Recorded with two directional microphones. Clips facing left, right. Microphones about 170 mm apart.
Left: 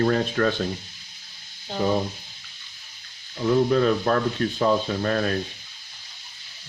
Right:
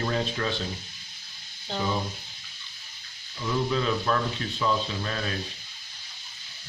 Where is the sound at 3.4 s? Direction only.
50° left (ahead or behind).